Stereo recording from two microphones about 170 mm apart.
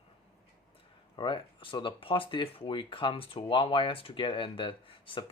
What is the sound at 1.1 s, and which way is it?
Speech, 30° left (ahead or behind).